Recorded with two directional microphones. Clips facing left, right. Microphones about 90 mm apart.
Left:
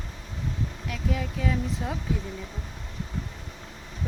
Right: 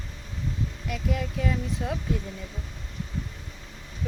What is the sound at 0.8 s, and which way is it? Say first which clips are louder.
Speech: right 1 dB; centre (ahead or behind).